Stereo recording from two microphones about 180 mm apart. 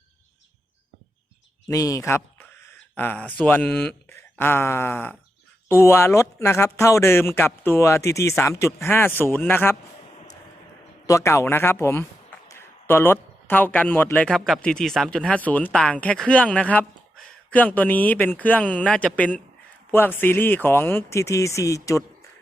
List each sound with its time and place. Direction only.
1.7 s speech: 20° left (ahead or behind)
11.0 s a man's voice: 15° left (ahead or behind)